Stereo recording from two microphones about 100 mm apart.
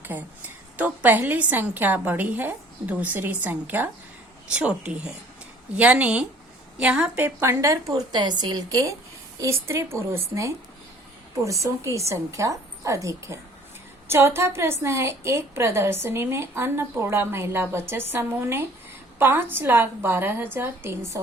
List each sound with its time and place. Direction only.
0.0 s a woman's voice: 20° right (ahead or behind)
7.3 s a woman's voice: 25° right (ahead or behind)